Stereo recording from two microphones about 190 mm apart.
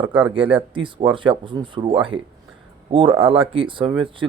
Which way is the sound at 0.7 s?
25° right (ahead or behind).